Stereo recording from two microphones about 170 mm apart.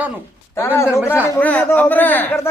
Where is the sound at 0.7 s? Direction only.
15° left (ahead or behind).